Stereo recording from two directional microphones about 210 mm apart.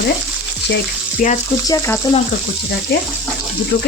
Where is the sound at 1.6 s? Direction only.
15° left (ahead or behind).